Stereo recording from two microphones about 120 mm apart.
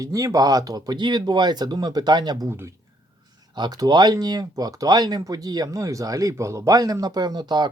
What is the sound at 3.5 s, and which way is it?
Speech, 35° right (ahead or behind).